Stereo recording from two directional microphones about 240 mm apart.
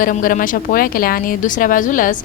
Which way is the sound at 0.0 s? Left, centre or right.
Left.